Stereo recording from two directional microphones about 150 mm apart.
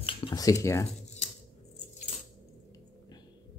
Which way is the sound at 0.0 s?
30° left (ahead or behind).